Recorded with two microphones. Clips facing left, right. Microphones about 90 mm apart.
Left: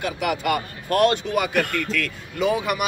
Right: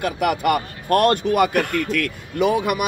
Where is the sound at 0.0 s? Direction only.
50° right (ahead or behind).